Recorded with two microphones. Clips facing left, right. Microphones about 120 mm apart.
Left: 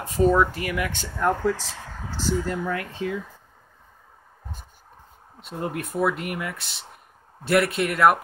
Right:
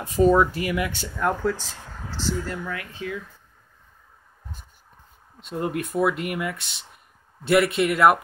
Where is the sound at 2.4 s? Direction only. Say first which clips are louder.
Left 4 dB; 20° left (ahead or behind).